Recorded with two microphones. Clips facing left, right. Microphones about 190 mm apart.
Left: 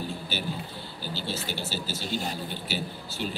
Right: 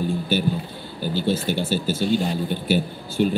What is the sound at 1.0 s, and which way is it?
A man's voice, 50° right (ahead or behind).